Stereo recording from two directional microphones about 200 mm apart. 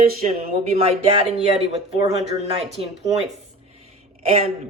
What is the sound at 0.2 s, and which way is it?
Speech, 35° right (ahead or behind).